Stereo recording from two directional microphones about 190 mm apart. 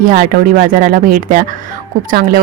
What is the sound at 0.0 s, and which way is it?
Speech, 45° right (ahead or behind).